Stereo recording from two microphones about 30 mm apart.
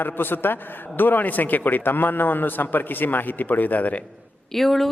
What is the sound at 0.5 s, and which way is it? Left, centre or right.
A man's voice, left.